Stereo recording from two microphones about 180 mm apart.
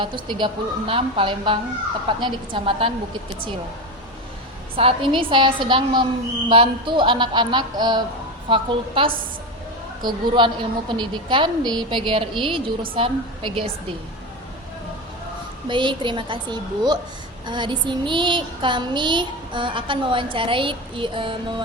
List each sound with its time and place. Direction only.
0.0 s a woman's voice: 25° right (ahead or behind)
4.8 s a woman's voice: 30° right (ahead or behind)
15.6 s a woman's voice: 25° right (ahead or behind)